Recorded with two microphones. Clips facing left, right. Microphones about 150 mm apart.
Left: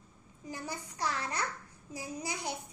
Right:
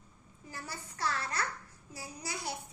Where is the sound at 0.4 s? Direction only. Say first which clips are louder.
Left 4 dB; 15° left (ahead or behind).